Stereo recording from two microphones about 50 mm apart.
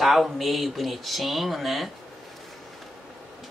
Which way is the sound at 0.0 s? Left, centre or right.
Centre.